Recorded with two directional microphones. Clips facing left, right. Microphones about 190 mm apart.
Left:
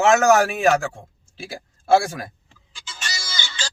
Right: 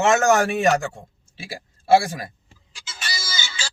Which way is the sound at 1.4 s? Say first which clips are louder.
Left 1 dB; centre (ahead or behind).